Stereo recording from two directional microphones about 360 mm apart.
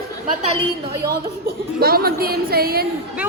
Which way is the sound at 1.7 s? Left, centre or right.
Right.